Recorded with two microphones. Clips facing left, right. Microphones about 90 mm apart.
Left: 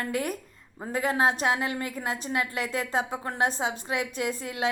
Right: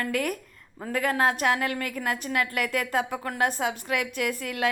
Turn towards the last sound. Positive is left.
turn(degrees=25)  # may be behind; listen again after turning